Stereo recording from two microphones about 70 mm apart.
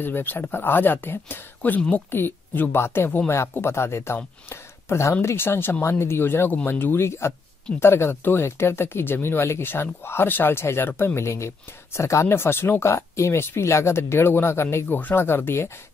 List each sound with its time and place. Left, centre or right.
0.0 s speech: left